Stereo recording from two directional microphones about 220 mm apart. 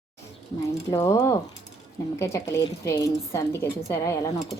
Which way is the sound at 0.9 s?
15° left (ahead or behind).